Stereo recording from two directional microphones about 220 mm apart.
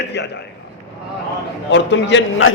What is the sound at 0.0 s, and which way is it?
Speech, 50° left (ahead or behind).